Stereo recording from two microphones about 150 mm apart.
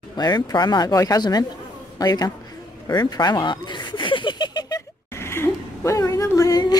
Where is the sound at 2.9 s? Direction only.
30° left (ahead or behind).